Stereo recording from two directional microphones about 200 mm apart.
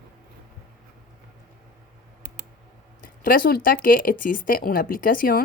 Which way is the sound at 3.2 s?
45° left (ahead or behind).